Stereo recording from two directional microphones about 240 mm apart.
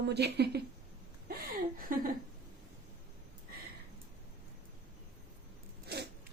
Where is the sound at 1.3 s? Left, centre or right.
Right.